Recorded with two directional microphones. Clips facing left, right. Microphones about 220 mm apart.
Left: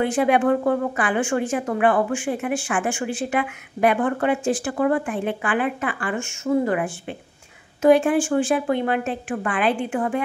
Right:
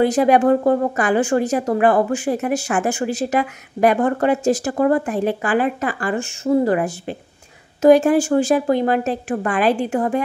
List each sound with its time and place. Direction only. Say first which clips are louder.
0.0 s speech: right 4 dB; 40° right (ahead or behind)